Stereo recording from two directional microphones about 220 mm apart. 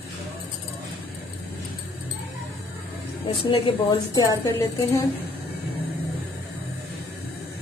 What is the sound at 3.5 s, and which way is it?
A woman's voice, 20° left (ahead or behind).